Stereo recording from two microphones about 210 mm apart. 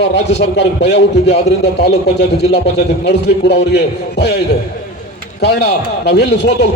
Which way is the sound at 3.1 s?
55° left (ahead or behind).